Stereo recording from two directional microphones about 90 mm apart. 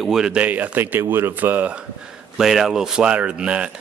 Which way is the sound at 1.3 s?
20° right (ahead or behind).